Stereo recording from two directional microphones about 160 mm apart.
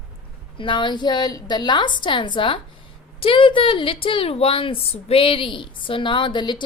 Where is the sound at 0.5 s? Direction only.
30° left (ahead or behind).